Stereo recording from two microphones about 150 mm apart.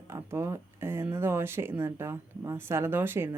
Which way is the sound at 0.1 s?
15° right (ahead or behind).